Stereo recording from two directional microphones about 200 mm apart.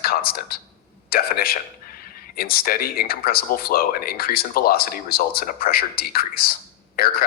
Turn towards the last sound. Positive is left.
turn(degrees=50)  # may be behind; listen again after turning